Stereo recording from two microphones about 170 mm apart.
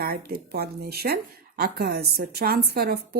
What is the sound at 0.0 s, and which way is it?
A woman's voice, 60° right (ahead or behind).